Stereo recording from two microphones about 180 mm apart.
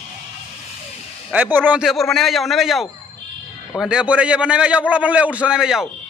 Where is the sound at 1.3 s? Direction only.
10° right (ahead or behind).